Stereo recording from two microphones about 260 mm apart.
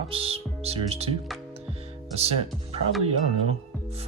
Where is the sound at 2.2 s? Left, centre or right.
Right.